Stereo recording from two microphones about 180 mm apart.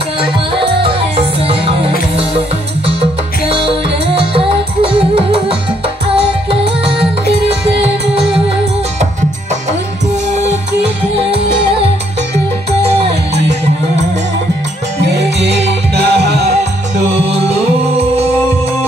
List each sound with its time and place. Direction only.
0.8 s music: 30° right (ahead or behind)
7.8 s music: 30° right (ahead or behind)
11.1 s music: 30° right (ahead or behind)
15.0 s music: 70° right (ahead or behind)